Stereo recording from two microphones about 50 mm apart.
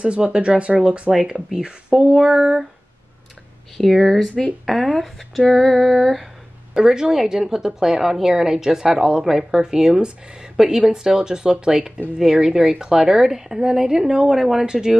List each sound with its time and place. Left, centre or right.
0.0 s a woman's voice: right
3.7 s female singing: centre
6.7 s a woman's voice: centre
10.5 s a sound: centre
10.8 s a woman's voice: centre